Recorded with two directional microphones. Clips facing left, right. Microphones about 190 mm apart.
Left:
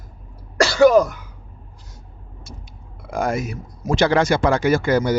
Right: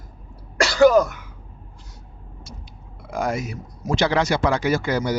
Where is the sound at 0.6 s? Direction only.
25° left (ahead or behind).